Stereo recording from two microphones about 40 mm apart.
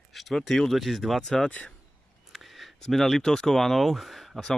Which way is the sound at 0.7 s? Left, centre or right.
Centre.